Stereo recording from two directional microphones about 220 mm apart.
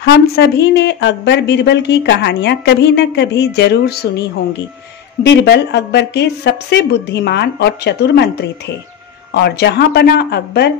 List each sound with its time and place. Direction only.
0.0 s a woman's voice: 50° left (ahead or behind)
5.2 s a woman's voice: 50° left (ahead or behind)